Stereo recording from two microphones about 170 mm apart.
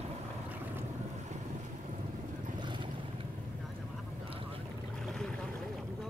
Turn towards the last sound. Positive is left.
turn(degrees=5)  # may be behind; listen again after turning